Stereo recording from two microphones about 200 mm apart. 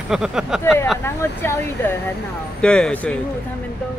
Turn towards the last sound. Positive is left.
turn(degrees=5)  # may be behind; listen again after turning